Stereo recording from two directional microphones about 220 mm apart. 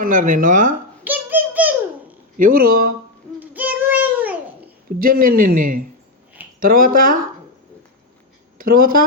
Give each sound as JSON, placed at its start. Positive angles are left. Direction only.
{"t": 0.0, "sound": "a man's voice", "side_deg": -35}
{"t": 1.0, "sound": "a sound", "side_deg": -10}
{"t": 2.4, "sound": "a man's voice", "side_deg": -40}
{"t": 3.4, "sound": "child singing", "side_deg": -5}
{"t": 4.9, "sound": "a man's voice", "side_deg": -40}
{"t": 8.5, "sound": "speech", "side_deg": -40}